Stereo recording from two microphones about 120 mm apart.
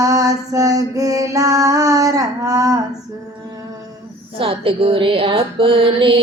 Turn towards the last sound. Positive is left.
turn(degrees=-45)  # may be behind; listen again after turning